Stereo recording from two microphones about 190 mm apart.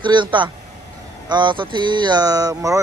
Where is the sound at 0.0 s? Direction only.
25° right (ahead or behind).